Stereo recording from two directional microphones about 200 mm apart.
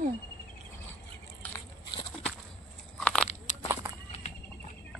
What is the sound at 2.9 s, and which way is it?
Biting, 5° left (ahead or behind).